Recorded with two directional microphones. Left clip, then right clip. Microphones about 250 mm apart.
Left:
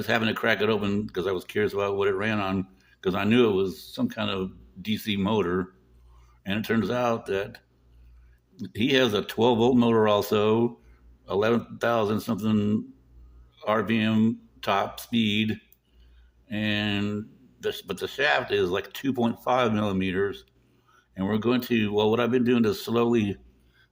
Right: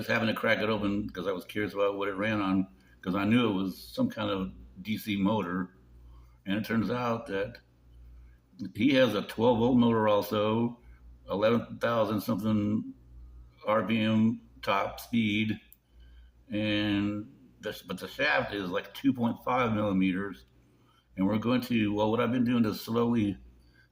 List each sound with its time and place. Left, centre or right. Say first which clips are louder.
0.1 s speech: left 3 dB; left